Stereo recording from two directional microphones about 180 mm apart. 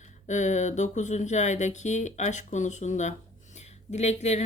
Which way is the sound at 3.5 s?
40° left (ahead or behind).